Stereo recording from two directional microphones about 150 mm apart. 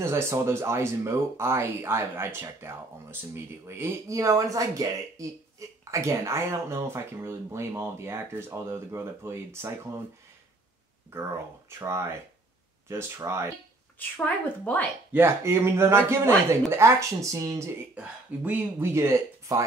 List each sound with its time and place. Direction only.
0.0 s speech: 20° right (ahead or behind)
11.1 s speech: 15° right (ahead or behind)
13.9 s a woman's voice: 10° left (ahead or behind)
15.1 s speech: 15° right (ahead or behind)
17.9 s speech: 10° right (ahead or behind)